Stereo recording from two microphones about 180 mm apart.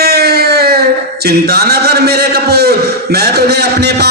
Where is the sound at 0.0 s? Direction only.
60° right (ahead or behind).